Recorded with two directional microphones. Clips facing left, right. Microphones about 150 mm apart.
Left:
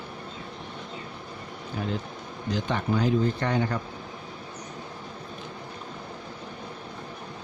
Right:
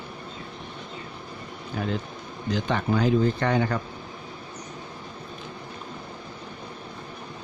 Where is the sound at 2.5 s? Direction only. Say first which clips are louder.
Right 2 dB; 90° right.